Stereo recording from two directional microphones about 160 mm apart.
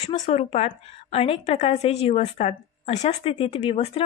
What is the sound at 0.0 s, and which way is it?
A woman's voice, 40° left (ahead or behind).